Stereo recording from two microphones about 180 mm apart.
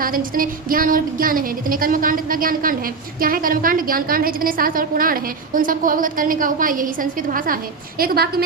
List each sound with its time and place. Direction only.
0.0 s speech: 50° right (ahead or behind)